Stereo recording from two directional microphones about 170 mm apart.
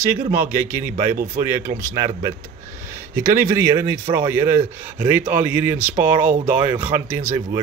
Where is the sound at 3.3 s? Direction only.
20° right (ahead or behind).